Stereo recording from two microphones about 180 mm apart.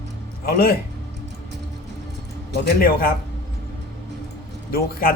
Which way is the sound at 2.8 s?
55° left (ahead or behind).